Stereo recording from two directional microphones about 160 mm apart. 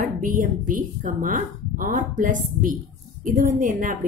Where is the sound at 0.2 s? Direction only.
60° right (ahead or behind).